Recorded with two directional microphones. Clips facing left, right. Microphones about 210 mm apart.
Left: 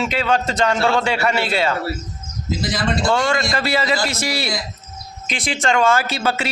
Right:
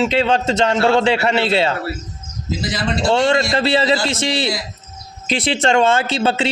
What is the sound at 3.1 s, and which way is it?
A man's voice, 25° right (ahead or behind).